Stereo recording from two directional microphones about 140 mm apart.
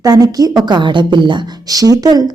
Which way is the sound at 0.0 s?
25° right (ahead or behind).